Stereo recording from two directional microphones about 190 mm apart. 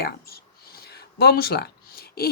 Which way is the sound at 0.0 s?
55° left (ahead or behind).